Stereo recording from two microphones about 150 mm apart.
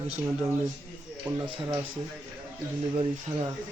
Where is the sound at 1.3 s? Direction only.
10° right (ahead or behind).